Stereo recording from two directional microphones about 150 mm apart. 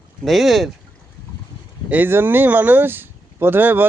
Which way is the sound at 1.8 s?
10° right (ahead or behind).